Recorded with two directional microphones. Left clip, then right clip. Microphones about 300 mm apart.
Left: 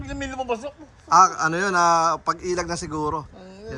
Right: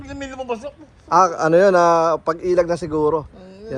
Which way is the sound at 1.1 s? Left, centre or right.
Centre.